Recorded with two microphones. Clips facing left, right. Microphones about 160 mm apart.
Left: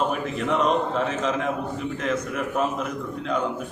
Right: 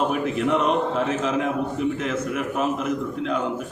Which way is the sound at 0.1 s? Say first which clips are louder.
Right 3 dB; 5° right (ahead or behind).